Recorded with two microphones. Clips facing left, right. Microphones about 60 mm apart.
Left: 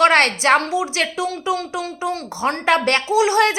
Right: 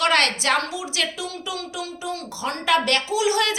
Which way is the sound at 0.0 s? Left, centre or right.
Left.